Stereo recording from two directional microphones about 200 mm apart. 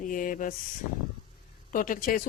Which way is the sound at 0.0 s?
40° left (ahead or behind).